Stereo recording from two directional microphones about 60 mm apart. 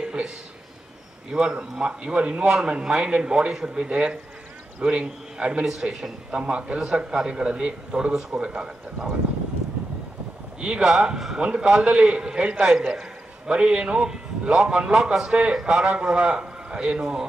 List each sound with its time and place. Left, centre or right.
0.0 s a sound: centre
1.3 s a man's voice: centre
10.6 s a man's voice: centre